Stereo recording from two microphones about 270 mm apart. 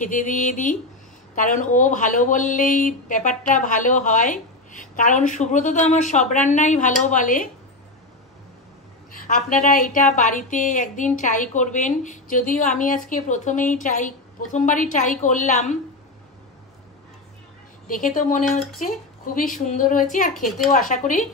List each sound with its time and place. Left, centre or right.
0.0 s speech: left
9.3 s speech: left
17.8 s a woman's voice: left